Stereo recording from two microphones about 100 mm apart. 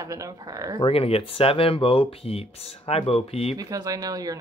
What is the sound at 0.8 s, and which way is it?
Speech, 75° left (ahead or behind).